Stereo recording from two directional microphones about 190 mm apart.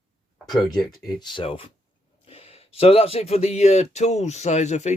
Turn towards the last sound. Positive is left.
turn(degrees=35)  # may be behind; listen again after turning